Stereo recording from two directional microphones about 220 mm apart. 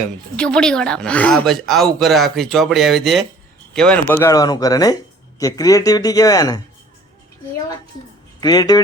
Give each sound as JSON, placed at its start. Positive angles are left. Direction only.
{"t": 0.3, "sound": "speech", "side_deg": 5}
{"t": 8.4, "sound": "speech", "side_deg": 15}